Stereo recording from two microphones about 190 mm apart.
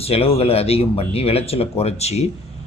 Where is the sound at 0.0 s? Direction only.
30° left (ahead or behind).